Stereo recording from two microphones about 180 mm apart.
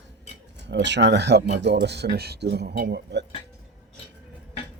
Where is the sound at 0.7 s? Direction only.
75° right (ahead or behind).